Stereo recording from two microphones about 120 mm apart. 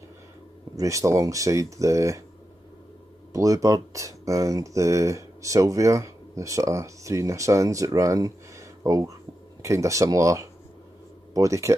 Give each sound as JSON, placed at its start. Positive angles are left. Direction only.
{"t": 0.7, "sound": "speech", "side_deg": -25}
{"t": 3.3, "sound": "speech", "side_deg": -30}